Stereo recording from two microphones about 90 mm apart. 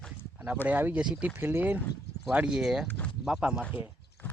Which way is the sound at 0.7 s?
20° right (ahead or behind).